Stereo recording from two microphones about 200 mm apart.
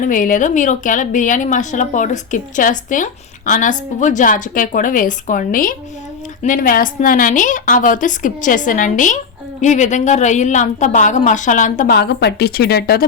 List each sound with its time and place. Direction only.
0.0 s a woman's voice: 40° left (ahead or behind)
11.9 s speech: 55° left (ahead or behind)